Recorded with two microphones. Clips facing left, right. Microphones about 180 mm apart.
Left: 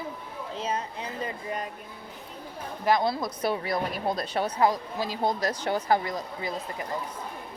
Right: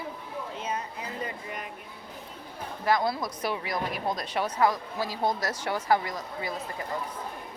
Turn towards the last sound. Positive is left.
turn(degrees=25)  # may be behind; listen again after turning